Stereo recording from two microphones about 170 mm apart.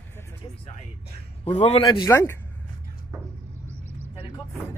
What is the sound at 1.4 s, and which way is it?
Speech, 40° left (ahead or behind).